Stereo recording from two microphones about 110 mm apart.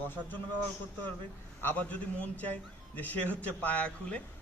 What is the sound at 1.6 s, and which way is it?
A man's voice, 15° left (ahead or behind).